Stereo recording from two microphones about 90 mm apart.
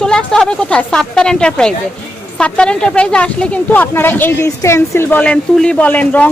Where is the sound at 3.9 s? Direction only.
25° left (ahead or behind).